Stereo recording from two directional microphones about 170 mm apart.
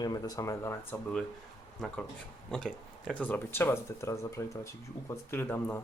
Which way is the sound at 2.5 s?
5° left (ahead or behind).